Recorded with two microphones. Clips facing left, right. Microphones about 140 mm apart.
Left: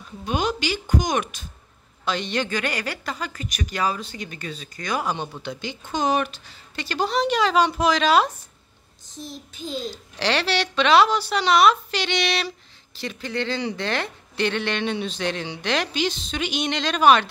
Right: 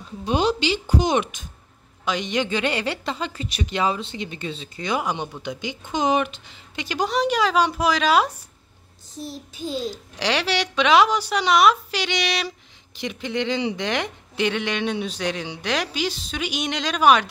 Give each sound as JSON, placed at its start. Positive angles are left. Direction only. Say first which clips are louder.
{"t": 0.2, "sound": "a woman's voice", "louder": "right 3 dB", "side_deg": -30}
{"t": 9.6, "sound": "speech", "louder": "right 3 dB", "side_deg": -5}